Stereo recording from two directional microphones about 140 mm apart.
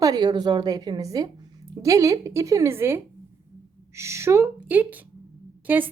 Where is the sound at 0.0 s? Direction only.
30° right (ahead or behind).